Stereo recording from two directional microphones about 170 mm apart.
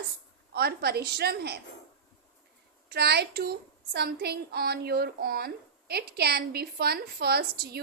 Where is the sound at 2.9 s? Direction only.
75° right (ahead or behind).